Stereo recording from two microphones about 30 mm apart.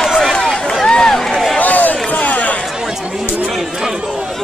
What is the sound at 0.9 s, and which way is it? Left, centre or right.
Run, left.